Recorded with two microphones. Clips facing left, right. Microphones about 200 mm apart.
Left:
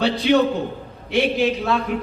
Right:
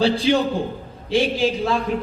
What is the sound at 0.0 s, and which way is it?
Speech, 30° right (ahead or behind).